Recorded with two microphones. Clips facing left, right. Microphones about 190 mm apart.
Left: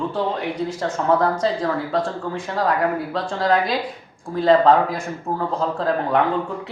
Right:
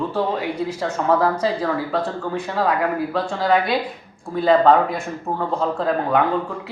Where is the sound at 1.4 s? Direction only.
5° right (ahead or behind).